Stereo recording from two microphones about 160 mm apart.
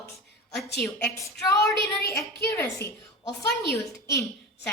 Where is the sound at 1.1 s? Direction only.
20° left (ahead or behind).